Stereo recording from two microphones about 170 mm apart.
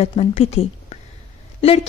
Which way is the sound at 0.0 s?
35° left (ahead or behind).